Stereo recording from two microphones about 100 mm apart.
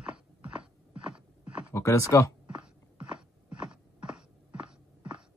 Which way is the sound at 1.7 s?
30° left (ahead or behind).